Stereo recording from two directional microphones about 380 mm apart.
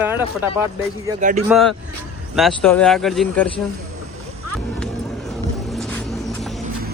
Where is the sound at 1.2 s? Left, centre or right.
Centre.